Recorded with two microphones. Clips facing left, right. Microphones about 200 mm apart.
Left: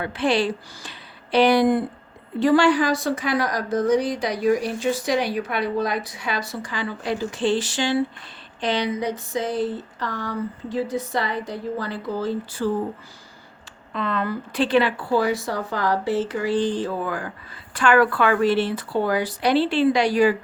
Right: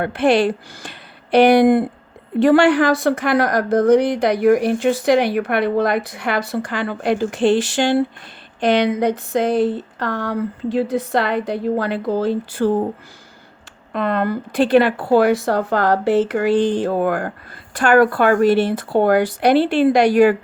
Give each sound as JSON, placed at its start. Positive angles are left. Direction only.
{"t": 0.0, "sound": "a woman's voice", "side_deg": -55}
{"t": 13.9, "sound": "a woman's voice", "side_deg": -55}
{"t": 17.7, "sound": "speech", "side_deg": -45}